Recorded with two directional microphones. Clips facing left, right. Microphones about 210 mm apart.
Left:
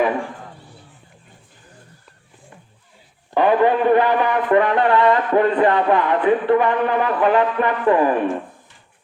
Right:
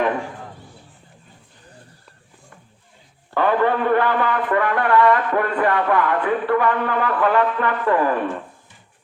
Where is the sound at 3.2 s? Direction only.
15° left (ahead or behind).